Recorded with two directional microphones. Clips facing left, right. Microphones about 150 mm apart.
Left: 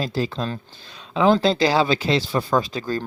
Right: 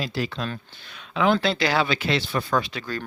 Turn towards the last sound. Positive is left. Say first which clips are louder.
# left 4 dB
turn(degrees=35)  # may be behind; listen again after turning